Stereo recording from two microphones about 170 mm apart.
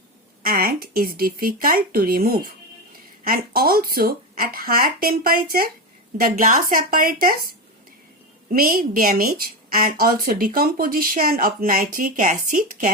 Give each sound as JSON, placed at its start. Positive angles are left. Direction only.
{"t": 0.4, "sound": "a woman's voice", "side_deg": -60}
{"t": 8.5, "sound": "a woman's voice", "side_deg": -55}